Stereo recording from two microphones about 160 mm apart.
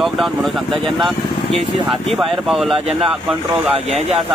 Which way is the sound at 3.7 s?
40° right (ahead or behind).